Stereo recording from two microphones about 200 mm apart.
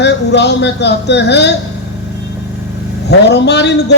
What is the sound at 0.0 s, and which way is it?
A man's voice, 60° left (ahead or behind).